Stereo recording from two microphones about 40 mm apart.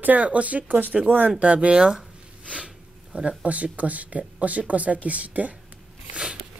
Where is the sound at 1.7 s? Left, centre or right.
Centre.